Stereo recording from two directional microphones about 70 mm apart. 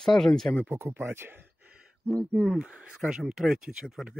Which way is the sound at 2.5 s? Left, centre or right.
Centre.